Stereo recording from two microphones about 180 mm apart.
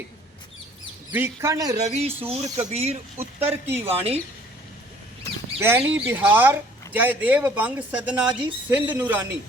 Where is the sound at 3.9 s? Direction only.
35° right (ahead or behind).